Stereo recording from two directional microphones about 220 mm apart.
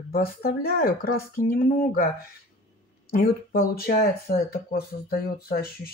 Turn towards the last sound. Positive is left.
turn(degrees=45)  # may be behind; listen again after turning